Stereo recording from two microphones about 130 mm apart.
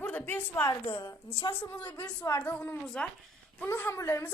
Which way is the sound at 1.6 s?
15° left (ahead or behind).